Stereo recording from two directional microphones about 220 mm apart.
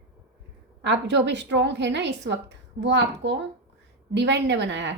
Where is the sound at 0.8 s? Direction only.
50° right (ahead or behind).